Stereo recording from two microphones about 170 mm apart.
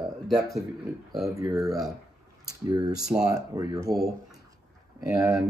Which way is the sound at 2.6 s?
20° right (ahead or behind).